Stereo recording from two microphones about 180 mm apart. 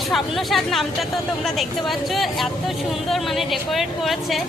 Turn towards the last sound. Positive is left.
turn(degrees=0)  # may be behind; listen again after turning